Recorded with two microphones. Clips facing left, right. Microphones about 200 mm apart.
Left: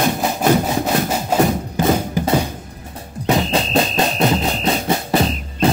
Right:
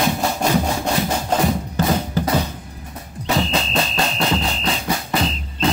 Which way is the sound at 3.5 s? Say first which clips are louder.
Left 4 dB; 45° left (ahead or behind).